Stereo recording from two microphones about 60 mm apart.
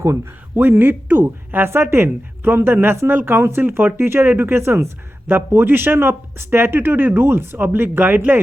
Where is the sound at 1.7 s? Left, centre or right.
Right.